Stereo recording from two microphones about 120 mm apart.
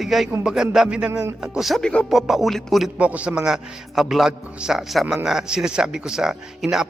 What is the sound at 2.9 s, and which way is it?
A man's voice, 10° right (ahead or behind).